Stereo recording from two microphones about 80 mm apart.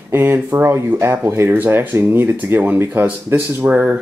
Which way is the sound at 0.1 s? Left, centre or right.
Right.